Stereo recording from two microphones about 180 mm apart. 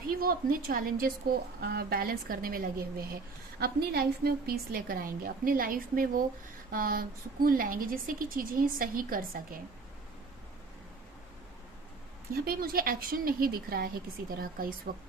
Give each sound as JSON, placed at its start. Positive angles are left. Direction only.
{"t": 0.1, "sound": "a woman's voice", "side_deg": -55}
{"t": 12.3, "sound": "a woman's voice", "side_deg": -55}